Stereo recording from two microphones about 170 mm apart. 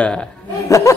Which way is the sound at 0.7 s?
20° left (ahead or behind).